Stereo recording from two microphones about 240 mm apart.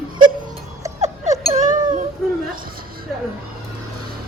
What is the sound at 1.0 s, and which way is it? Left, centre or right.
Chink, right.